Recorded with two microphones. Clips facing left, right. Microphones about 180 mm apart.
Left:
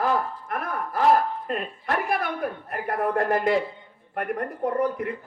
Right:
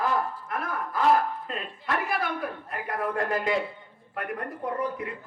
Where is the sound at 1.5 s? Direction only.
55° left (ahead or behind).